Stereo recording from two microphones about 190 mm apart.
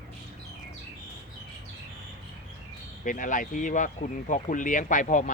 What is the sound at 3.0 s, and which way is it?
Speech, 45° left (ahead or behind).